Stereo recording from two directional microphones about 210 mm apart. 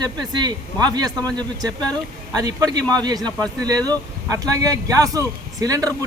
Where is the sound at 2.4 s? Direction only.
15° right (ahead or behind).